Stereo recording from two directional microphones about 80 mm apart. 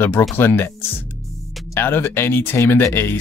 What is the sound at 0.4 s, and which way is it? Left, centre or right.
Speech, left.